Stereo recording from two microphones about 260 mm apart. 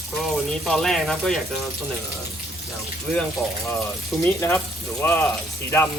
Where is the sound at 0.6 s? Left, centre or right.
Centre.